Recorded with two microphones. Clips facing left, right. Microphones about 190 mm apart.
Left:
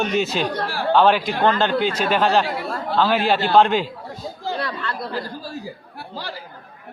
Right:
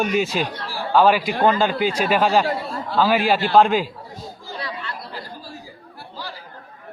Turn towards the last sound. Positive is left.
turn(degrees=60)  # may be behind; listen again after turning